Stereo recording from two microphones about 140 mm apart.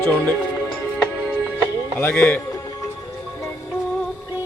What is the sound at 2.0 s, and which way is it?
Speech, 15° left (ahead or behind).